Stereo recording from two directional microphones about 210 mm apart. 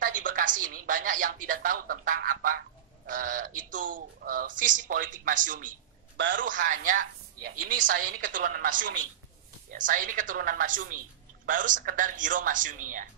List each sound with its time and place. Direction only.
0.0 s speech: 40° right (ahead or behind)